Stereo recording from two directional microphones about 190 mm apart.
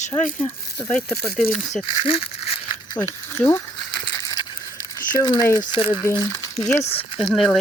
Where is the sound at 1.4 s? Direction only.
45° left (ahead or behind).